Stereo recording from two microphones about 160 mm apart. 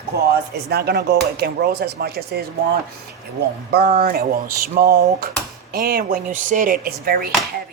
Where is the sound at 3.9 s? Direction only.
65° right (ahead or behind).